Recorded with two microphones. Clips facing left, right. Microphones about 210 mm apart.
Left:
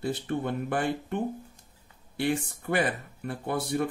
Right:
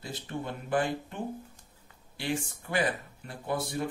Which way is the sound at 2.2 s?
55° left (ahead or behind).